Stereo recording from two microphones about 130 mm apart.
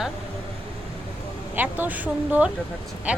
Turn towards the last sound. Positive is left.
turn(degrees=-10)  # may be behind; listen again after turning